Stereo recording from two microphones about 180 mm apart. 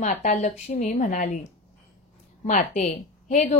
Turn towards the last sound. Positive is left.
turn(degrees=40)  # may be behind; listen again after turning